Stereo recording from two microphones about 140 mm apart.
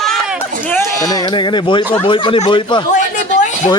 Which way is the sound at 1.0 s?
30° left (ahead or behind).